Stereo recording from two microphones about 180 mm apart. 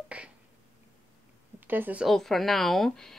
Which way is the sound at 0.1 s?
5° right (ahead or behind).